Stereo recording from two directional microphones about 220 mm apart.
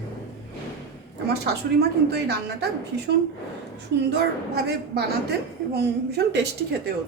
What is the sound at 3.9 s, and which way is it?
Speech, 50° right (ahead or behind).